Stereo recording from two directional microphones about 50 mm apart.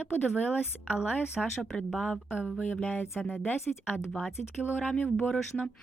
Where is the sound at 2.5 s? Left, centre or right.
Left.